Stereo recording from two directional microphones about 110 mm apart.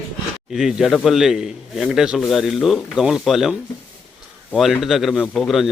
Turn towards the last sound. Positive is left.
turn(degrees=0)  # may be behind; listen again after turning